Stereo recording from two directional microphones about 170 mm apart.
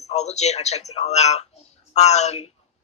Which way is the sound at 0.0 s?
40° left (ahead or behind).